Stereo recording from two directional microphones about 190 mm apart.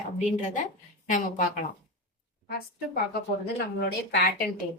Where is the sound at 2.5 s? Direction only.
55° left (ahead or behind).